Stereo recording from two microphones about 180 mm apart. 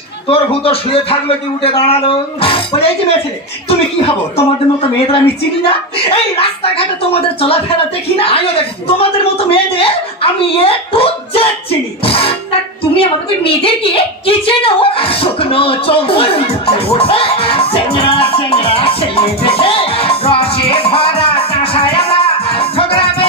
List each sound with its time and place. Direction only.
0.3 s speech: 30° left (ahead or behind)
3.6 s speech: 35° left (ahead or behind)
5.7 s speech: 30° left (ahead or behind)
12.0 s a sound: 30° left (ahead or behind)